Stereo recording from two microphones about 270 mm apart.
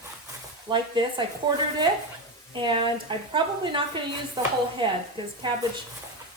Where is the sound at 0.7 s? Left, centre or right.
Centre.